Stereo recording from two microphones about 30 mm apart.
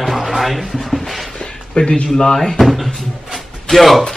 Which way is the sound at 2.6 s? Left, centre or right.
Centre.